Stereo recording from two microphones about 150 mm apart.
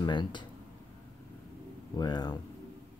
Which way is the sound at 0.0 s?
30° left (ahead or behind).